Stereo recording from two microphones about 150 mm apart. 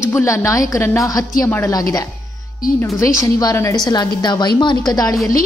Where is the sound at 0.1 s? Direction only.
20° left (ahead or behind).